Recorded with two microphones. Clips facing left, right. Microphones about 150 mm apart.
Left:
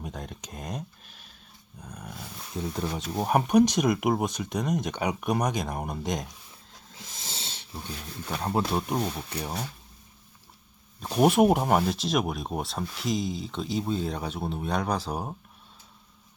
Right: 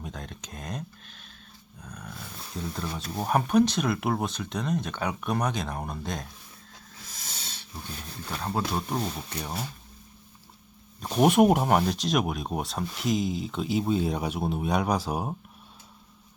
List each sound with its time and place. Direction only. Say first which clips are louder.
0.0 s a sound: left 1 dB; 10° left (ahead or behind)
1.8 s dog: left 1 dB; 10° left (ahead or behind)
2.6 s speech: left 3 dB; 20° left (ahead or behind)
6.9 s wheeze: left 3 dB; 25° left (ahead or behind)
8.3 s speech: left 2 dB; 20° left (ahead or behind)
11.0 s speech: right 1 dB; centre (ahead or behind)